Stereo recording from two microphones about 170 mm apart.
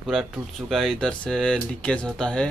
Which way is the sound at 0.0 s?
Centre (ahead or behind).